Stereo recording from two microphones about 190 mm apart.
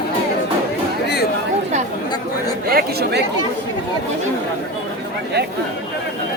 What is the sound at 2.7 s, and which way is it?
Speech, 50° right (ahead or behind).